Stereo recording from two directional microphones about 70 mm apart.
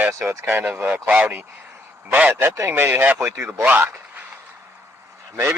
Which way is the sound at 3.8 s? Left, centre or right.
Right.